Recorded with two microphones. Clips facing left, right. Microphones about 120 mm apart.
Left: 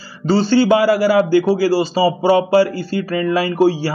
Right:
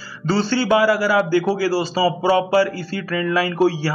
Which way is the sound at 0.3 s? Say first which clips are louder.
Left 5 dB; 20° left (ahead or behind).